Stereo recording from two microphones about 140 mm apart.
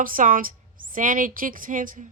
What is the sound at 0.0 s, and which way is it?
A woman's voice, 80° right.